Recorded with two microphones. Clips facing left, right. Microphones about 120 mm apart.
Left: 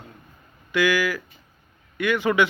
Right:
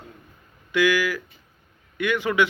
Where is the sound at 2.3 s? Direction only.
Centre (ahead or behind).